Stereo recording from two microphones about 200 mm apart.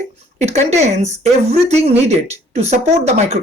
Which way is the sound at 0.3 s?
35° right (ahead or behind).